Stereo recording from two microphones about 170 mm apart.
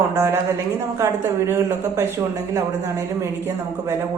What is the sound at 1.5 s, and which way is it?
Speech, 15° right (ahead or behind).